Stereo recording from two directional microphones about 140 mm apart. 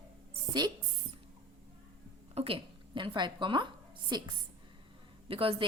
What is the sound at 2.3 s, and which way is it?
A woman's voice, 40° right (ahead or behind).